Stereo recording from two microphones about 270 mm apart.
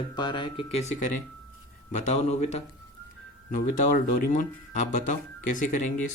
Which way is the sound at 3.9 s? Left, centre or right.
Left.